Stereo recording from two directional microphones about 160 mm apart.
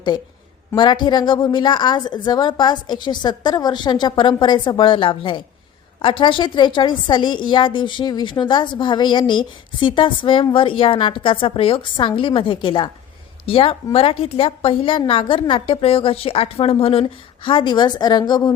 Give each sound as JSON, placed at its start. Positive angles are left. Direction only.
{"t": 0.8, "sound": "a woman's voice", "side_deg": 30}